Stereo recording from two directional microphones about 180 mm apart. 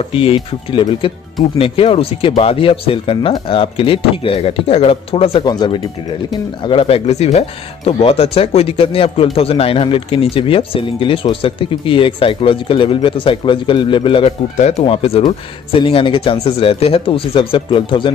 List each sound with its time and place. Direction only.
0.0 s speech: 30° left (ahead or behind)